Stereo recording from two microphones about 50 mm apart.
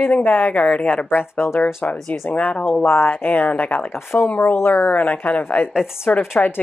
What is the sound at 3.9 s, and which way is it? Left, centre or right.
Speech, left.